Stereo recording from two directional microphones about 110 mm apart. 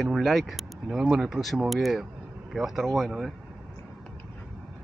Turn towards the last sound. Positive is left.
turn(degrees=0)  # may be behind; listen again after turning